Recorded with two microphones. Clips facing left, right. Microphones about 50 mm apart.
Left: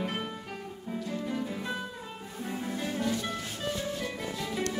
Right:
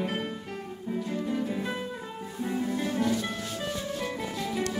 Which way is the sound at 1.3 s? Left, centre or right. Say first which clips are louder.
Right 4 dB; centre.